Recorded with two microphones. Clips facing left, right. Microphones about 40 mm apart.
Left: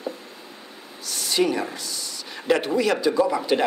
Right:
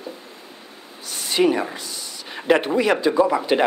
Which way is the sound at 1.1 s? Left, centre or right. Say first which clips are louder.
Right 3 dB; right.